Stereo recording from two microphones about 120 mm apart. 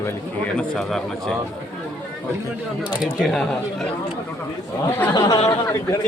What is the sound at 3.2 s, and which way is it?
Speech, centre (ahead or behind).